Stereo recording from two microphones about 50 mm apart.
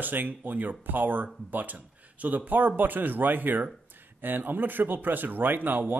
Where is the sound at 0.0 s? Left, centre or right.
Right.